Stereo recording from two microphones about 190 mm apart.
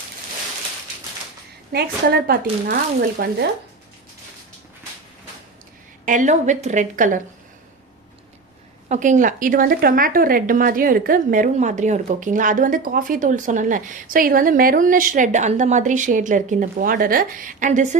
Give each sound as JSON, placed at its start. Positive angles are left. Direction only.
{"t": 1.7, "sound": "a woman's voice", "side_deg": -55}
{"t": 6.1, "sound": "a woman's voice", "side_deg": -40}
{"t": 8.9, "sound": "speech", "side_deg": -40}